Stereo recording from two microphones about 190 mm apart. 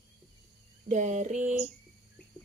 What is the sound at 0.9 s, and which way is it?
Speech, 40° right (ahead or behind).